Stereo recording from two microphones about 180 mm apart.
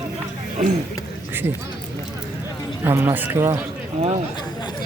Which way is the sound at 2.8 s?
10° right (ahead or behind).